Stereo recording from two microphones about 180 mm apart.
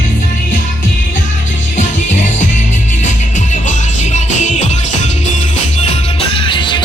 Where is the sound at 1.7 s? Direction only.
45° left (ahead or behind).